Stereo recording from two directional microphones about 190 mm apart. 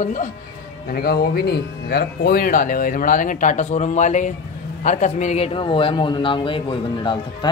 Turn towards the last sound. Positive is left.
turn(degrees=25)  # may be behind; listen again after turning